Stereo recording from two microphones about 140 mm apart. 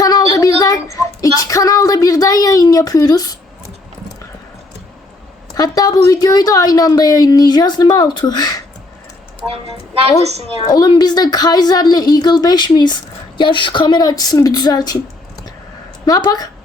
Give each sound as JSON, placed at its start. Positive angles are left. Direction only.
{"t": 0.0, "sound": "a sound", "side_deg": 25}
{"t": 0.6, "sound": "child singing", "side_deg": 25}
{"t": 5.5, "sound": "a woman's voice", "side_deg": 25}
{"t": 9.5, "sound": "a woman's voice", "side_deg": -45}
{"t": 10.7, "sound": "a woman's voice", "side_deg": 30}
{"t": 16.0, "sound": "a woman's voice", "side_deg": 30}